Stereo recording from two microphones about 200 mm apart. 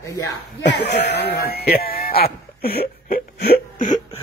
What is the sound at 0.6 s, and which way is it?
A man's voice, 60° left (ahead or behind).